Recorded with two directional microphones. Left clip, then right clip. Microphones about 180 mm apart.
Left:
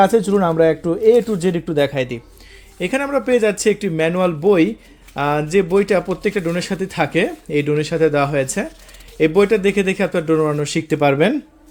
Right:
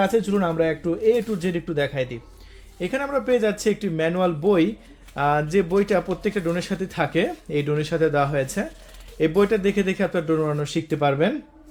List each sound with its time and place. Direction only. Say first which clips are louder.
0.0 s speech: left 7 dB; 40° left (ahead or behind)